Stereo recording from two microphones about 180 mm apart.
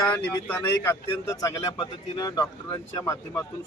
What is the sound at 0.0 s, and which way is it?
Speech, 10° left (ahead or behind).